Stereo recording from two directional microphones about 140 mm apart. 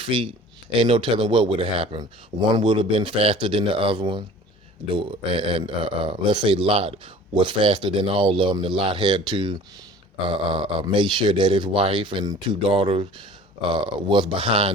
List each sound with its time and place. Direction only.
0.0 s speech: 40° right (ahead or behind)